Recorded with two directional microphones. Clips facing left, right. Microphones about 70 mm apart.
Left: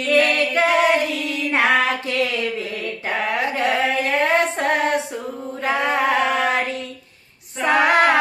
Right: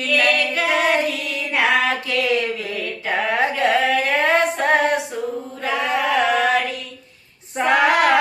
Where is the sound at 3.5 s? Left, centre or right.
Left.